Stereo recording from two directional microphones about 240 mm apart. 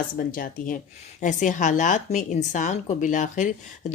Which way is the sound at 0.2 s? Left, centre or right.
Left.